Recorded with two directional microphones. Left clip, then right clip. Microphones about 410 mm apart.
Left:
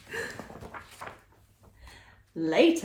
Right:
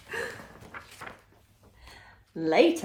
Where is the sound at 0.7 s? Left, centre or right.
Centre.